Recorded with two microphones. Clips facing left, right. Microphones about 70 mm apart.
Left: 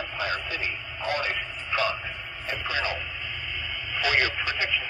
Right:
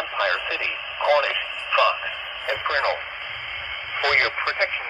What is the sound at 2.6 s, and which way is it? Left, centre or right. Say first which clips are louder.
Speech: right 7 dB; right.